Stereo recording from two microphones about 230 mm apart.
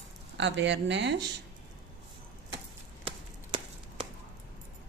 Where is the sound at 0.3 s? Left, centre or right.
Right.